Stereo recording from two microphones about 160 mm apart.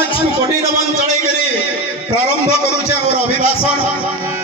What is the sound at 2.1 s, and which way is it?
A man's voice, 40° left (ahead or behind).